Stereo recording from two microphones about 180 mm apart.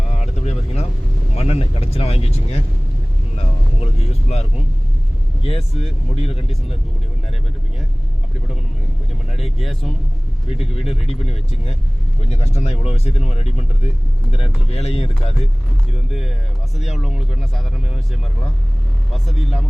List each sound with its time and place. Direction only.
0.1 s a sound: 40° left (ahead or behind)
1.4 s speech: 35° left (ahead or behind)
3.3 s vehicle: 35° left (ahead or behind)
5.4 s speech: 35° left (ahead or behind)
9.6 s speech: centre (ahead or behind)
10.5 s speech: 35° left (ahead or behind)
16.0 s speech: centre (ahead or behind)
19.3 s speech: centre (ahead or behind)